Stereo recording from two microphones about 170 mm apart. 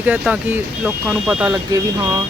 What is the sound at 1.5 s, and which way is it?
Speech, 20° right (ahead or behind).